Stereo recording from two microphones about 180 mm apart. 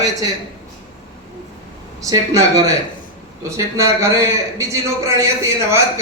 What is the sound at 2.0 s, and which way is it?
A man's voice, 20° right (ahead or behind).